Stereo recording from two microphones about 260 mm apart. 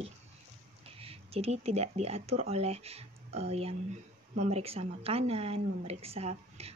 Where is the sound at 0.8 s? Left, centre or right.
Right.